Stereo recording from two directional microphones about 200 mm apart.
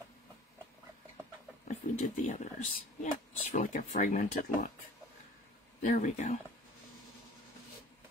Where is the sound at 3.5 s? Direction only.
40° left (ahead or behind).